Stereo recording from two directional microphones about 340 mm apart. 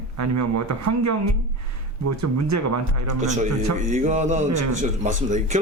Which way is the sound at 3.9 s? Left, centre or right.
Right.